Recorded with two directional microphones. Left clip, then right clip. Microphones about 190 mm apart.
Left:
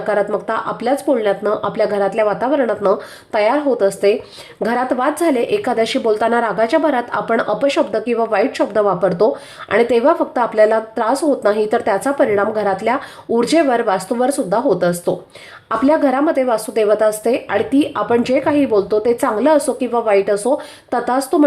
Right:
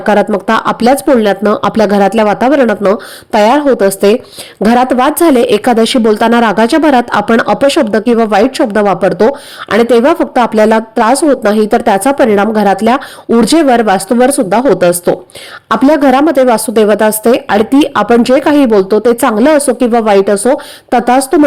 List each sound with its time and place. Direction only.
0.1 s speech: 40° right (ahead or behind)